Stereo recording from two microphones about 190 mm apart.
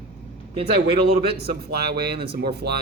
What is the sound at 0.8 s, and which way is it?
Speech, 55° right (ahead or behind).